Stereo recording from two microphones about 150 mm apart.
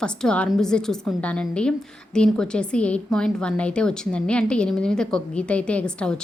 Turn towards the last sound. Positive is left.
turn(degrees=5)  # may be behind; listen again after turning